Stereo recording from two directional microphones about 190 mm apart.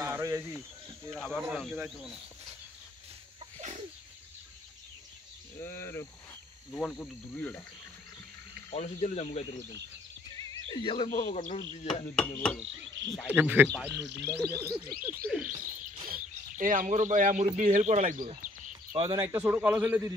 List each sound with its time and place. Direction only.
0.0 s cricket: 15° right (ahead or behind)
1.1 s chop: centre (ahead or behind)
5.6 s cricket: 15° left (ahead or behind)
8.7 s speech: 35° left (ahead or behind)
10.7 s speech: 25° left (ahead or behind)
11.1 s speech: 45° left (ahead or behind)
11.9 s chop: 5° left (ahead or behind)
13.0 s frog: 75° right (ahead or behind)
13.3 s a man's voice: 10° right (ahead or behind)
16.1 s speech: 45° right (ahead or behind)
18.9 s a man's voice: 20° right (ahead or behind)